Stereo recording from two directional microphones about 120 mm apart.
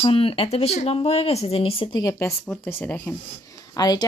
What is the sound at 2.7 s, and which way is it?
Speech, 15° left (ahead or behind).